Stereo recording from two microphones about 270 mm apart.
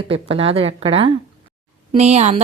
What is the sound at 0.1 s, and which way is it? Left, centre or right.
Speech, right.